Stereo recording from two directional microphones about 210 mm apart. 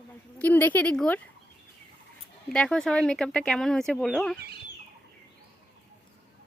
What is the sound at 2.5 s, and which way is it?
Speech, 5° left (ahead or behind).